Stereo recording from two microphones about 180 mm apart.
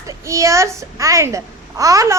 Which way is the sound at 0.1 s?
15° right (ahead or behind).